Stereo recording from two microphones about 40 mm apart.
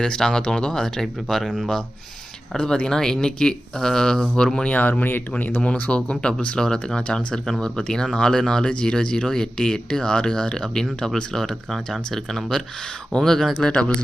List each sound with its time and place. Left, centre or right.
0.0 s speech: centre
2.9 s speech: centre
4.7 s speech: left
5.5 s speech: left; by 13.5 s centre
13.6 s speech: left